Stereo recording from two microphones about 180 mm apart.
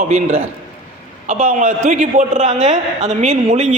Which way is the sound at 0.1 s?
35° right (ahead or behind).